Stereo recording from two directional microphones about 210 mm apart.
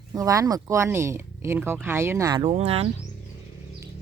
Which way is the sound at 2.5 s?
30° right (ahead or behind).